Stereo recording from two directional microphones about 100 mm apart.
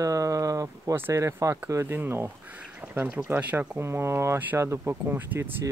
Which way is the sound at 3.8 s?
25° right (ahead or behind).